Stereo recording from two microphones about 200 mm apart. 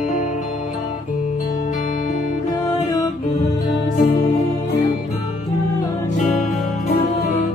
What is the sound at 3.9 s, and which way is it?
Music, 40° left (ahead or behind).